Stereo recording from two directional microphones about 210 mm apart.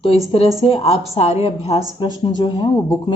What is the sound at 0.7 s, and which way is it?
Speech, 30° left (ahead or behind).